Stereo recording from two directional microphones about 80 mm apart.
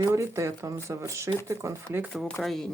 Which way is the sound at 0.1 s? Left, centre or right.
Right.